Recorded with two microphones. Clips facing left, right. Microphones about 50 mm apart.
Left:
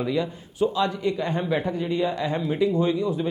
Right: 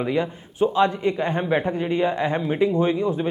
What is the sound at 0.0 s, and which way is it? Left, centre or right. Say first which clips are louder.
A man's voice: right 2 dB; right.